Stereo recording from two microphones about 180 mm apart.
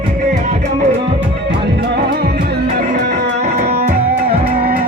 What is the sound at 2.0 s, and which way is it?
Music, 60° right (ahead or behind).